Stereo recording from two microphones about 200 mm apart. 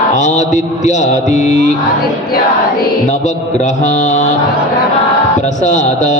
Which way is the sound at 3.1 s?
35° left (ahead or behind).